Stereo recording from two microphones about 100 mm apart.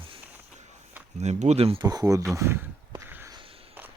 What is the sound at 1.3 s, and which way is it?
Speech, 90° right.